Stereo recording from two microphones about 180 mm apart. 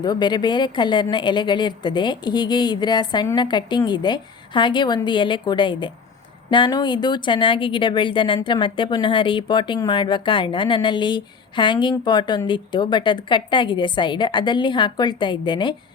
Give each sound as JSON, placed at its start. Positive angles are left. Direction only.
{"t": 0.0, "sound": "speech", "side_deg": 25}